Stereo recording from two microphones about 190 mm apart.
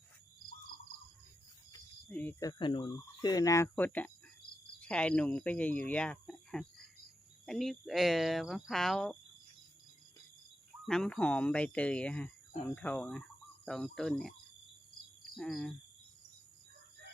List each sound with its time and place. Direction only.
2.0 s speech: 10° left (ahead or behind)
2.4 s speech: 20° left (ahead or behind); by 6.7 s 5° left (ahead or behind)
7.4 s cricket: centre (ahead or behind)
10.8 s speech: 5° left (ahead or behind)
13.7 s cricket: centre (ahead or behind)
15.4 s cricket: centre (ahead or behind)